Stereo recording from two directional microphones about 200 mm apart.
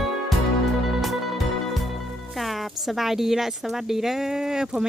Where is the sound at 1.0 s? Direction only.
Centre (ahead or behind).